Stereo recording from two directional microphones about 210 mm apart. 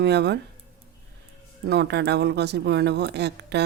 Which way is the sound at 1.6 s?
50° right (ahead or behind).